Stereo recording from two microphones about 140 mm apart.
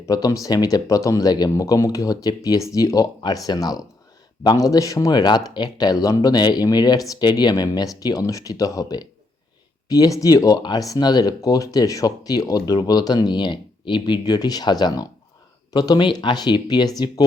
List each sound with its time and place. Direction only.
0.1 s speech: 25° left (ahead or behind)